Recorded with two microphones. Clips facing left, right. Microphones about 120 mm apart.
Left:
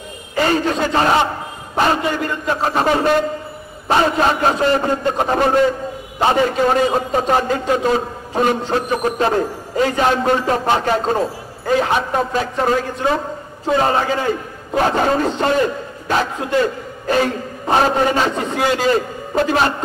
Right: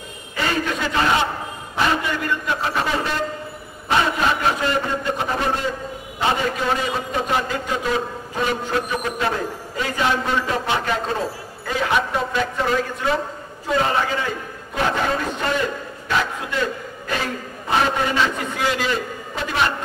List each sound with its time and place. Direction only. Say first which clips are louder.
0.4 s a man's voice: left 6 dB; 35° left (ahead or behind)
6.7 s a man's voice: left 7 dB; 40° left (ahead or behind)
8.5 s a man's voice: left 4 dB; 30° left (ahead or behind)
17.6 s a man's voice: left 5 dB; 40° left (ahead or behind)